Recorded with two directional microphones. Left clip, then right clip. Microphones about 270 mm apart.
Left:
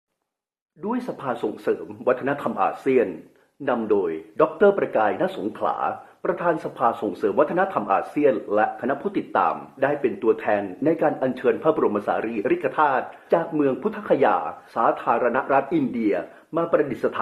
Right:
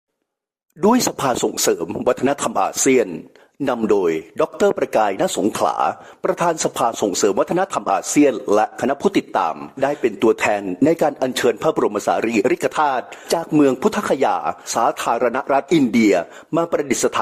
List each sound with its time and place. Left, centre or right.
0.8 s speech: right